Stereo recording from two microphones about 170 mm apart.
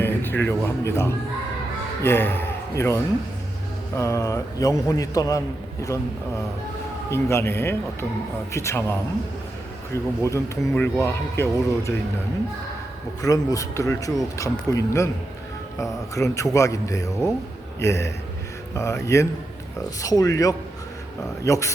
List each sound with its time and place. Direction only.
0.0 s a man's voice: 10° left (ahead or behind)
7.1 s speech: 15° left (ahead or behind)
9.9 s speech: 15° left (ahead or behind)
13.2 s a man's voice: 20° left (ahead or behind)